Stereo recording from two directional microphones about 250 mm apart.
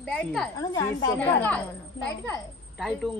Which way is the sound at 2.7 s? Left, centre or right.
Centre.